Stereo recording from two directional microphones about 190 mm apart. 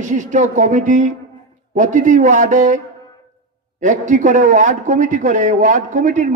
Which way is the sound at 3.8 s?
40° right (ahead or behind).